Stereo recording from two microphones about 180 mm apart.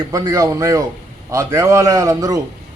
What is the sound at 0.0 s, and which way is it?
A man's voice, 20° right (ahead or behind).